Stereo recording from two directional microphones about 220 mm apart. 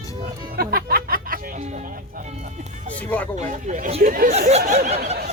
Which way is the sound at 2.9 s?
5° left (ahead or behind).